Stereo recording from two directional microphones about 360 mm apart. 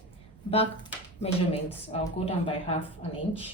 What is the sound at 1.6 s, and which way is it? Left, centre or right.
Speech, centre.